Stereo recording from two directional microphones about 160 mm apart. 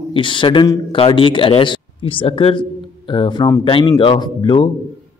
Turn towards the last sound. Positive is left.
turn(degrees=30)  # may be behind; listen again after turning